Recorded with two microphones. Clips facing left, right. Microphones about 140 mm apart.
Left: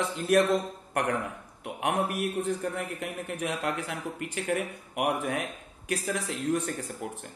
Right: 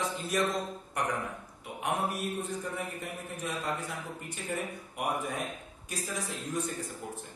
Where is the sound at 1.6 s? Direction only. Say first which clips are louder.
Left 4 dB; 65° left (ahead or behind).